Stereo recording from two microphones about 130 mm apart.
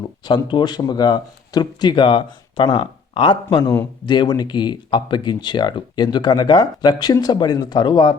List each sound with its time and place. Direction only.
0.3 s speech: 35° left (ahead or behind)